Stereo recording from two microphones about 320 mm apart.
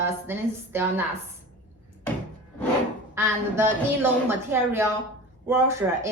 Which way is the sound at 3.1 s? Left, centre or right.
Centre.